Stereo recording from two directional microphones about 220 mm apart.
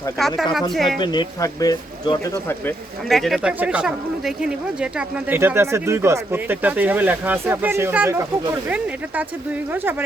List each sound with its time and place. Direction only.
0.2 s speech: centre (ahead or behind)
0.9 s speech: 20° left (ahead or behind)
3.1 s speech: centre (ahead or behind)